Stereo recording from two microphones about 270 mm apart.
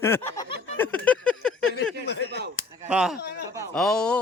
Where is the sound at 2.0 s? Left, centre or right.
Left.